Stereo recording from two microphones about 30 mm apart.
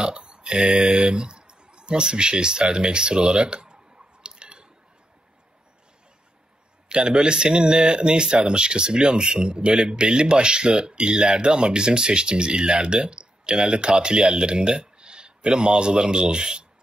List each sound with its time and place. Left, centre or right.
0.0 s speech: right
3.3 s clicking: right
6.9 s speech: right